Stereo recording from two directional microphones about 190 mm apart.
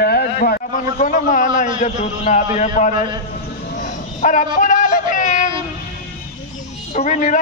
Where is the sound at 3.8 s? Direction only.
40° left (ahead or behind).